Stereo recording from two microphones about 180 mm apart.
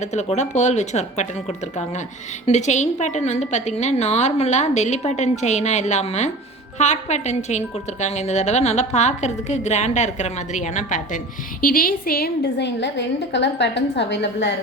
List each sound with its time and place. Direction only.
0.0 s a woman's voice: 40° left (ahead or behind); by 14.5 s 75° left (ahead or behind)